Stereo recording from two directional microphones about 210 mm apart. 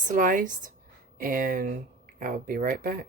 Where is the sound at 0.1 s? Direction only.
40° right (ahead or behind).